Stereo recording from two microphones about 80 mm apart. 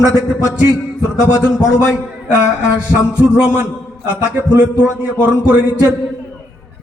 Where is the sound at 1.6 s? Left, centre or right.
Centre.